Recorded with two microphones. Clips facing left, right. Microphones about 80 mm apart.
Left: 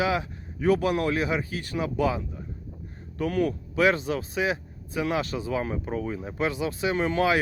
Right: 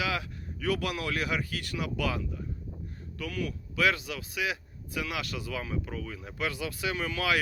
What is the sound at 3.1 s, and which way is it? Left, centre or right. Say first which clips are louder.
Speech: left 10 dB; left.